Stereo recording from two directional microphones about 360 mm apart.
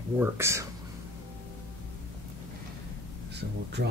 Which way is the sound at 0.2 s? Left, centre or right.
Centre.